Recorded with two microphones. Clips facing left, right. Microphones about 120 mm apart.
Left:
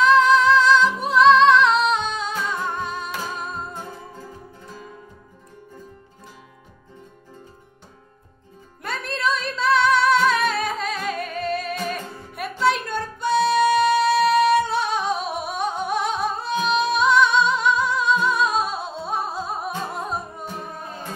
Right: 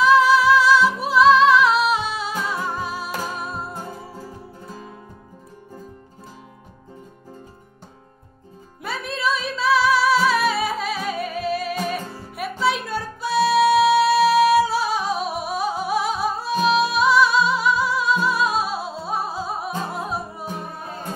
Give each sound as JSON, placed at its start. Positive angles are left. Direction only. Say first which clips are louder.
{"t": 0.0, "sound": "music", "louder": "even", "side_deg": -5}
{"t": 4.6, "sound": "music", "louder": "right 2 dB", "side_deg": -40}
{"t": 8.8, "sound": "music", "louder": "even", "side_deg": 0}